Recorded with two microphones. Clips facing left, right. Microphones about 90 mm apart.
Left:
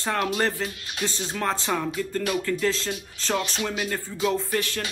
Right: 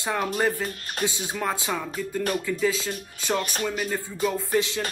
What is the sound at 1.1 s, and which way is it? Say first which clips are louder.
Speech: left 3 dB; 10° right (ahead or behind).